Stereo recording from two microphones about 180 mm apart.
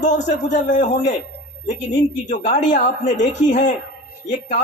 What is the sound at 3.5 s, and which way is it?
Speech, 45° left (ahead or behind).